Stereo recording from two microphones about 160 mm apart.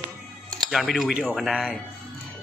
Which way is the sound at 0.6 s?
Centre (ahead or behind).